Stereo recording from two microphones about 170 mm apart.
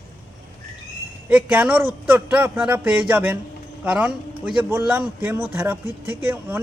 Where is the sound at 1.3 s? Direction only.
10° right (ahead or behind).